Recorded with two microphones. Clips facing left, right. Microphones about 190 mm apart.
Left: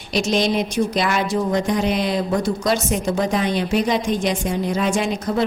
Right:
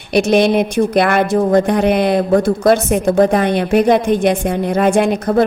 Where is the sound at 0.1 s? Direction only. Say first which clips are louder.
Right 7 dB; 60° right (ahead or behind).